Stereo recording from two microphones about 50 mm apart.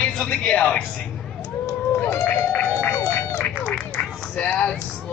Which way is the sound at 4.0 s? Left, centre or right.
Left.